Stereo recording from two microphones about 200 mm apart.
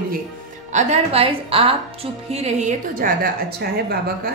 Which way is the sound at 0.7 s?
30° right (ahead or behind).